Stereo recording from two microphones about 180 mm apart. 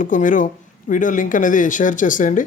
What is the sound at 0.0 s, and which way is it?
Speech, 45° left (ahead or behind).